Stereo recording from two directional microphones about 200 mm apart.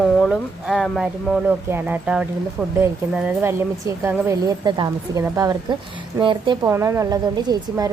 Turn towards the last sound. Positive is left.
turn(degrees=-20)  # may be behind; listen again after turning